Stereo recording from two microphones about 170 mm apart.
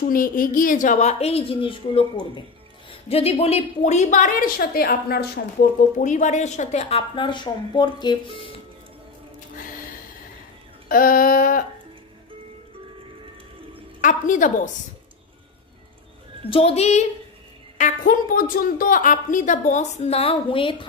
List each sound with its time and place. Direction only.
0.0 s a woman's voice: 55° left (ahead or behind); by 8.4 s 25° left (ahead or behind)
10.9 s a woman's voice: 55° left (ahead or behind)
14.0 s a woman's voice: 50° left (ahead or behind)
16.4 s speech: 35° left (ahead or behind)
17.7 s a woman's voice: 50° left (ahead or behind); by 20.7 s 30° left (ahead or behind)